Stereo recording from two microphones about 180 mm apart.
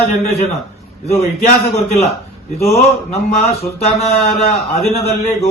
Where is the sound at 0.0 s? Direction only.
35° left (ahead or behind).